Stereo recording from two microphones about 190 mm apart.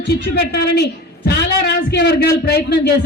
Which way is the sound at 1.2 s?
60° left (ahead or behind).